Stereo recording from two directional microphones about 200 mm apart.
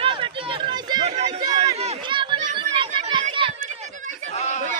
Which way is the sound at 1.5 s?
30° right (ahead or behind).